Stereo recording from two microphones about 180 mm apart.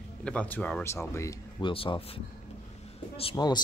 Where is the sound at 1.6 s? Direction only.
30° left (ahead or behind).